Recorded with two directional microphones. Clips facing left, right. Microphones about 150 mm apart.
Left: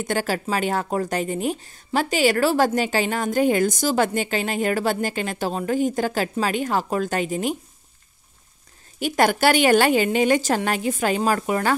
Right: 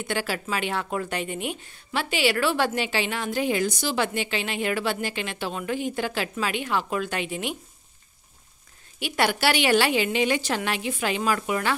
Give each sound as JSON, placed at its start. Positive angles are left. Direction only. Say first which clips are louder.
{"t": 0.0, "sound": "speech", "louder": "left 5 dB", "side_deg": 45}
{"t": 9.0, "sound": "a woman's voice", "louder": "left 5 dB", "side_deg": 45}